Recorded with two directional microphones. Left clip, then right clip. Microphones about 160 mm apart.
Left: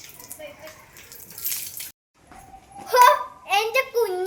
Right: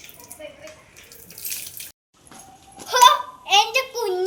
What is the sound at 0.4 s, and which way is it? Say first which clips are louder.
Bathtub: right 1 dB; 5° left (ahead or behind).